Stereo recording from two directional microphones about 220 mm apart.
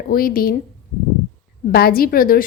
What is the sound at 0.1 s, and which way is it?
Speech, 40° left (ahead or behind).